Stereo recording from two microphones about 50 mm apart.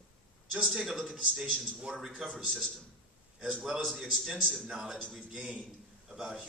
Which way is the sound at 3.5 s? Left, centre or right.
Centre.